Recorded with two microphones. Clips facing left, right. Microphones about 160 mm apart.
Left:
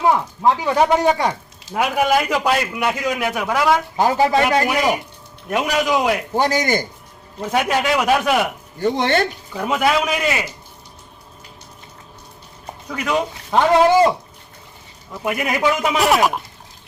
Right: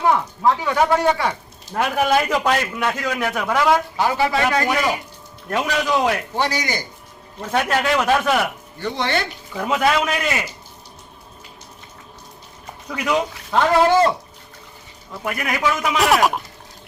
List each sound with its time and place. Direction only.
0.0 s a man's voice: 20° left (ahead or behind)
3.9 s speech: 40° left (ahead or behind)
4.4 s a man's voice: 25° left (ahead or behind)
6.3 s a man's voice: 45° left (ahead or behind)
7.5 s a man's voice: 10° left (ahead or behind)
8.8 s a man's voice: 45° left (ahead or behind)
9.6 s a man's voice: 5° left (ahead or behind)
13.5 s a man's voice: 15° left (ahead or behind)
15.2 s a man's voice: 15° left (ahead or behind)
16.0 s a man's voice: centre (ahead or behind)